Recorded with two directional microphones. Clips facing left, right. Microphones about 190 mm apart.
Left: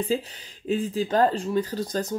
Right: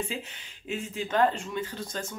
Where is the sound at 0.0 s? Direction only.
35° left (ahead or behind).